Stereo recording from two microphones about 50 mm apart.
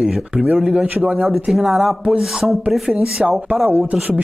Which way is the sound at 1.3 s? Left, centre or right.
Centre.